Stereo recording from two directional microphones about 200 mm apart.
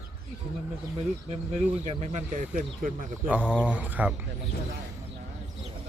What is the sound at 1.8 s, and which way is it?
Speech, 35° right (ahead or behind).